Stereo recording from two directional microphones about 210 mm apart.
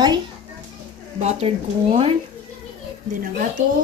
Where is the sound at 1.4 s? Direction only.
30° right (ahead or behind).